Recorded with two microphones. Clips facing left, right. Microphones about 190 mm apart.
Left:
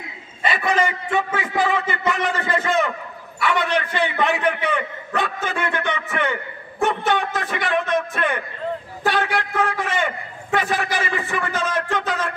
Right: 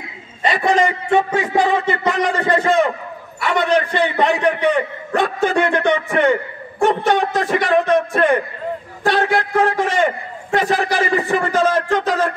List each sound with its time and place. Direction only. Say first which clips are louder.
0.5 s a man's voice: right 5 dB; 35° right (ahead or behind)